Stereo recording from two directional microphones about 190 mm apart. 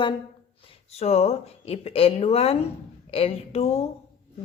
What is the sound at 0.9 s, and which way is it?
Speech, 35° left (ahead or behind).